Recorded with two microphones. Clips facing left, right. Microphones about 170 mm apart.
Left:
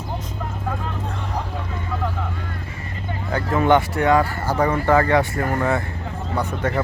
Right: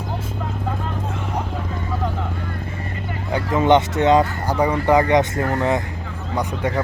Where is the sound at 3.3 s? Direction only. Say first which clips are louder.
Right 1 dB; 20° right (ahead or behind).